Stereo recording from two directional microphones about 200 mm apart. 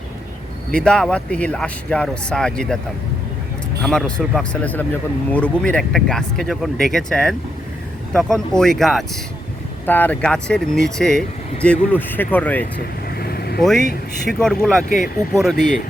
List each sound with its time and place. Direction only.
0.7 s speech: 5° left (ahead or behind)
3.8 s speech: centre (ahead or behind)
13.1 s vehicle: 50° left (ahead or behind)
13.6 s speech: centre (ahead or behind)